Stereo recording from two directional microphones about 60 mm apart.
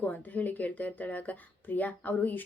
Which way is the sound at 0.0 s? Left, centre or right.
Left.